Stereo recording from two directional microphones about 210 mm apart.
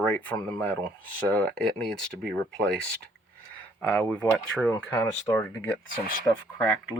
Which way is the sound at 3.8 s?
5° left (ahead or behind).